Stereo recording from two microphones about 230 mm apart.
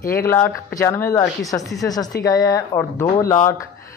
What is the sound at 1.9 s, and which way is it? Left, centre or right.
Speech, centre.